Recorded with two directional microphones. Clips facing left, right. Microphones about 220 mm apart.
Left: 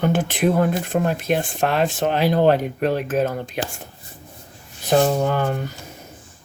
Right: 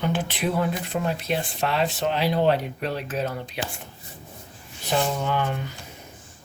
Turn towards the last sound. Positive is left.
turn(degrees=45)  # may be behind; listen again after turning